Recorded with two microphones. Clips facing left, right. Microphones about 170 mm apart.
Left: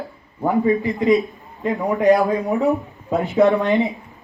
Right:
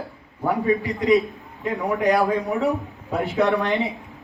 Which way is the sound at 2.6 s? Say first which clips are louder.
Left 4 dB; 20° left (ahead or behind).